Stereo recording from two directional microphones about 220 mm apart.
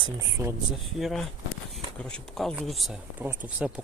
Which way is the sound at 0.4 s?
15° right (ahead or behind).